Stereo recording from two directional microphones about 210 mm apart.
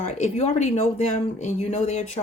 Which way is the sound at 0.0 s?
30° left (ahead or behind).